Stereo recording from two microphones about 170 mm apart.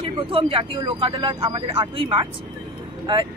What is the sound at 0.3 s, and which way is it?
Speech, 30° right (ahead or behind).